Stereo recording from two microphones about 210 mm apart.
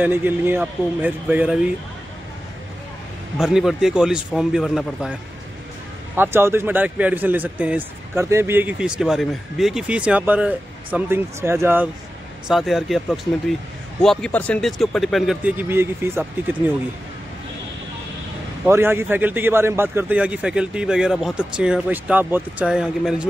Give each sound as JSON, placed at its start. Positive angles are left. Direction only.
{"t": 0.0, "sound": "speech", "side_deg": -10}
{"t": 3.3, "sound": "speech", "side_deg": 0}
{"t": 6.1, "sound": "speech", "side_deg": -10}
{"t": 18.7, "sound": "speech", "side_deg": -10}